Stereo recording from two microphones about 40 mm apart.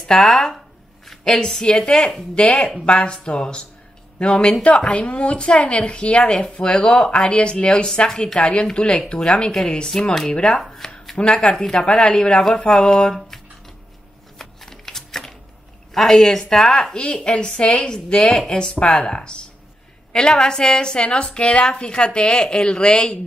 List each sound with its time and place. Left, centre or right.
0.0 s speech: centre
2.3 s a woman's voice: left; by 10.3 s centre
10.8 s a sound: centre
11.1 s a woman's voice: left
14.4 s a sound: centre
15.9 s a woman's voice: centre